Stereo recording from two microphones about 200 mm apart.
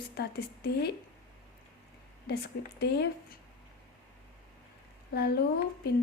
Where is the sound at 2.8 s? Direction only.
55° left (ahead or behind).